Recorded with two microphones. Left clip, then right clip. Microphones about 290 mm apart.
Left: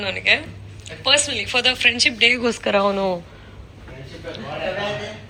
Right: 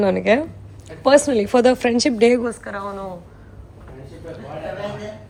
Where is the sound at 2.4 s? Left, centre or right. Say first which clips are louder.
Left 8 dB; centre.